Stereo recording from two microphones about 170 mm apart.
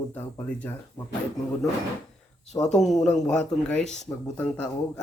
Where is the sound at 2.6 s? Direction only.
Centre (ahead or behind).